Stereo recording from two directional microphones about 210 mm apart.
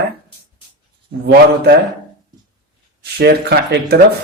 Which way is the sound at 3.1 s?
50° right (ahead or behind).